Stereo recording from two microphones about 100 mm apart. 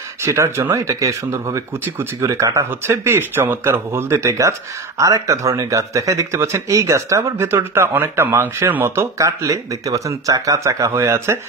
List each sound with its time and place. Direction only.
0.2 s speech: 30° right (ahead or behind)